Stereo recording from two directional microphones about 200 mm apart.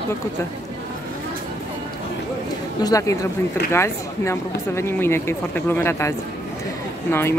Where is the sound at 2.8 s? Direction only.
15° left (ahead or behind).